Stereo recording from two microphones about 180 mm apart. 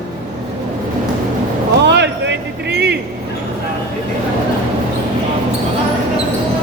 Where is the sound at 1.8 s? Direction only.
75° right (ahead or behind).